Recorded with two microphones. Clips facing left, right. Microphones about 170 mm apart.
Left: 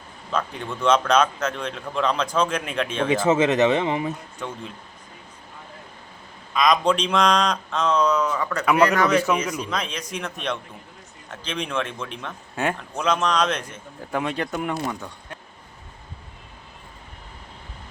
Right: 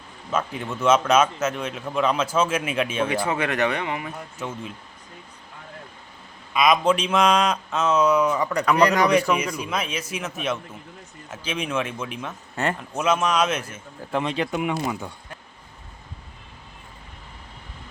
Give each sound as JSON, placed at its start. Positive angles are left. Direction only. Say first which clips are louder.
{"t": 0.3, "sound": "a man's voice", "louder": "right 1 dB", "side_deg": -5}
{"t": 3.1, "sound": "speech", "louder": "left 6 dB", "side_deg": 20}
{"t": 4.4, "sound": "speech", "louder": "right 1 dB", "side_deg": -5}
{"t": 6.5, "sound": "a man's voice", "louder": "right 1 dB", "side_deg": -5}
{"t": 14.1, "sound": "speech", "louder": "right 1 dB", "side_deg": 5}
{"t": 14.3, "sound": "a man's voice", "louder": "right 2 dB", "side_deg": -5}